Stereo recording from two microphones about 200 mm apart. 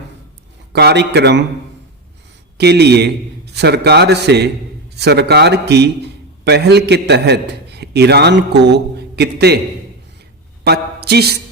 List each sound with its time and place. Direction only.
0.7 s a man's voice: 55° right (ahead or behind)
2.6 s a man's voice: 55° right (ahead or behind)
10.6 s a man's voice: 55° right (ahead or behind)